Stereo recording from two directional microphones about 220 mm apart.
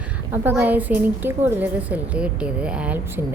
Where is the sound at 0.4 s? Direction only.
10° right (ahead or behind).